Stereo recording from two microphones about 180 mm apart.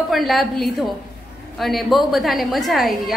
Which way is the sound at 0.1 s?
Centre (ahead or behind).